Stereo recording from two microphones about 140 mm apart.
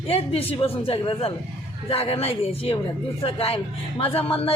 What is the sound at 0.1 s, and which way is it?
A man's voice, 45° left (ahead or behind).